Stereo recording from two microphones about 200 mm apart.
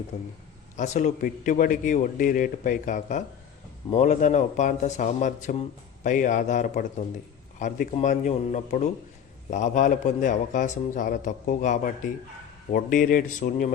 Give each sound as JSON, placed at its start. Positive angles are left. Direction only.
{"t": 0.1, "sound": "a man's voice", "side_deg": 45}